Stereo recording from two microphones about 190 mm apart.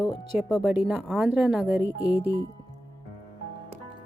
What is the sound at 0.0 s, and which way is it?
Speech, 5° right (ahead or behind).